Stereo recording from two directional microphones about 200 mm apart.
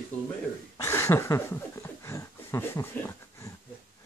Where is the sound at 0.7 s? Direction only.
15° left (ahead or behind).